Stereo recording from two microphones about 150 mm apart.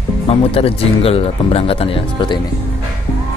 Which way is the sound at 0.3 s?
40° left (ahead or behind).